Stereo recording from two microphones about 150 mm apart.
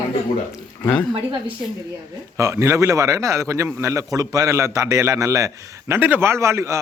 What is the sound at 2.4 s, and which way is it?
A man's voice, 20° right (ahead or behind).